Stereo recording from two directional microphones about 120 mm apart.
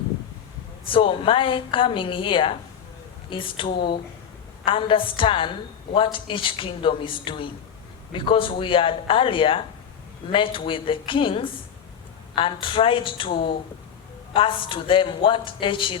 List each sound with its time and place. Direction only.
0.9 s a woman's voice: 50° left (ahead or behind)